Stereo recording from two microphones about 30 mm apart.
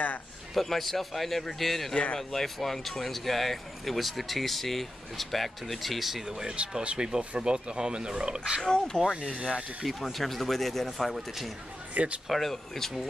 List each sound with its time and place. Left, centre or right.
0.6 s speech: centre
6.2 s speech: right
8.6 s speech: left
9.0 s speech: centre
9.4 s speech: right
10.1 s speech: centre
11.9 s speech: right
12.3 s speech: centre